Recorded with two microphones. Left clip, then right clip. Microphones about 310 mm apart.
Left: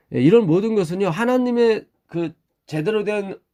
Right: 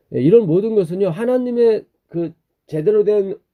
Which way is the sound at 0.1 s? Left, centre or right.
Centre.